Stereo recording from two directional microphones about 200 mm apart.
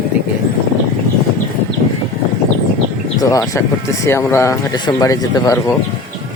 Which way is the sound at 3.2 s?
15° left (ahead or behind).